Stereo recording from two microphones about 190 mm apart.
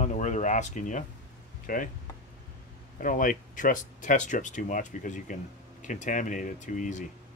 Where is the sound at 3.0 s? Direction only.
45° left (ahead or behind).